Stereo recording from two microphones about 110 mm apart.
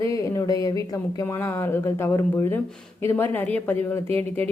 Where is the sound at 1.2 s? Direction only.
20° left (ahead or behind).